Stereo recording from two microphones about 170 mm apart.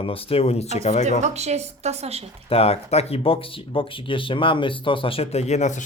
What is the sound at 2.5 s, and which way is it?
Speech, 35° left (ahead or behind).